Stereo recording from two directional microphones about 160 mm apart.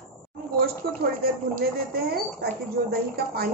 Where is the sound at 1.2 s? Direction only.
75° right (ahead or behind).